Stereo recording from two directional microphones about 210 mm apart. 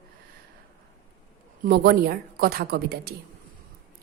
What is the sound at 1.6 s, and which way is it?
A woman's voice, 45° right (ahead or behind).